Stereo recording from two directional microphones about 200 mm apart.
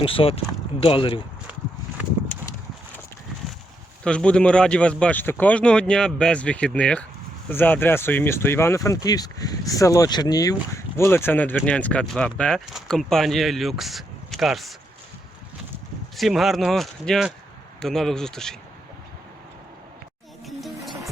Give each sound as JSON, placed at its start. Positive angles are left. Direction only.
{"t": 0.0, "sound": "speech", "side_deg": 25}
{"t": 4.0, "sound": "speech", "side_deg": 5}
{"t": 16.1, "sound": "speech", "side_deg": 0}
{"t": 20.6, "sound": "music", "side_deg": 0}